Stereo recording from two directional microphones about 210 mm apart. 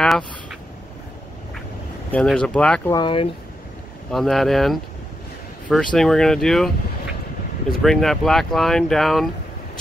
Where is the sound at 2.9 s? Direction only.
25° left (ahead or behind).